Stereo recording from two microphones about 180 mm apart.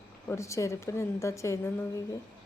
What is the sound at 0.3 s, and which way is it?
A woman's voice, 15° left (ahead or behind).